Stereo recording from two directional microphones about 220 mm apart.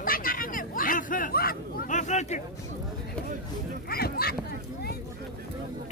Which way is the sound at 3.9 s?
45° left (ahead or behind).